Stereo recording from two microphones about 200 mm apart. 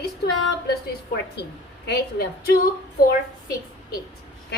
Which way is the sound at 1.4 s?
55° left (ahead or behind).